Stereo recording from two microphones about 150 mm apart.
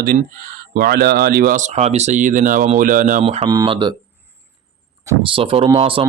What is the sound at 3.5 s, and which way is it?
Speech, 30° right (ahead or behind).